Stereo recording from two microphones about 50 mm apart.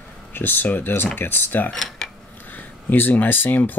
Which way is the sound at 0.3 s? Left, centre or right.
Left.